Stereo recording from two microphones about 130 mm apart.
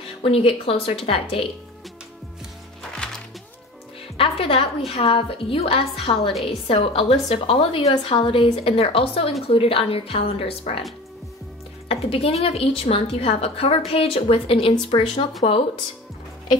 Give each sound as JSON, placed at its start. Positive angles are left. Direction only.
{"t": 0.2, "sound": "a woman's voice", "side_deg": 45}
{"t": 2.9, "sound": "music", "side_deg": 5}
{"t": 4.2, "sound": "a woman's voice", "side_deg": 45}
{"t": 11.9, "sound": "a woman's voice", "side_deg": 45}